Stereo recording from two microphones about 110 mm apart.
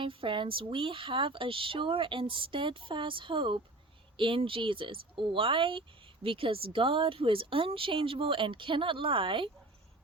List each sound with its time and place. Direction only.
0.0 s speech: 50° right (ahead or behind)